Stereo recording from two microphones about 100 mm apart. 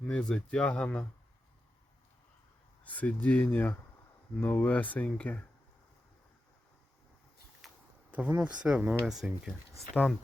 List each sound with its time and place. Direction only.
0.0 s speech: 10° left (ahead or behind)
2.8 s speech: 15° left (ahead or behind)
8.1 s speech: 15° right (ahead or behind); by 10.2 s 10° left (ahead or behind)